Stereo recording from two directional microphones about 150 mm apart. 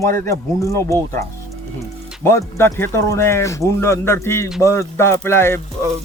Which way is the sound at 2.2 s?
15° left (ahead or behind).